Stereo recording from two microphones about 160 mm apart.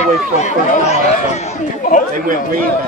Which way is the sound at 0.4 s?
45° left (ahead or behind).